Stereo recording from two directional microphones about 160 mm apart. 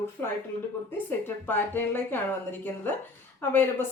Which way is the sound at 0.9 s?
15° left (ahead or behind).